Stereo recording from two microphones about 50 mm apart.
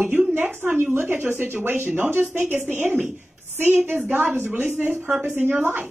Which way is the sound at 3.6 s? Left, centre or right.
Right.